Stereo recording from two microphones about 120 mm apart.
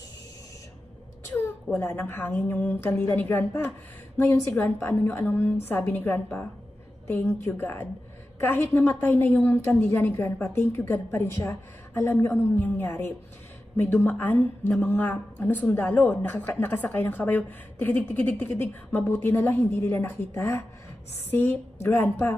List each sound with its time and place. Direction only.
1.3 s a woman's voice: 20° left (ahead or behind)
21.8 s a woman's voice: 20° left (ahead or behind)